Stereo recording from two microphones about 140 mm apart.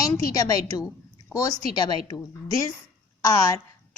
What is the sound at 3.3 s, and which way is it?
Speech, 20° left (ahead or behind).